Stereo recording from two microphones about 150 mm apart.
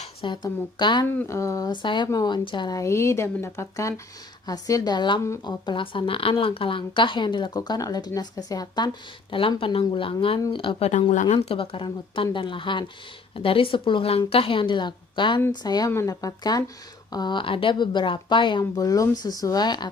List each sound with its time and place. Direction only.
0.2 s a woman's voice: 30° left (ahead or behind)
5.2 s speech: 20° left (ahead or behind)
5.6 s a woman's voice: 35° left (ahead or behind); by 11.3 s 50° left (ahead or behind)
11.4 s a woman's voice: 35° left (ahead or behind)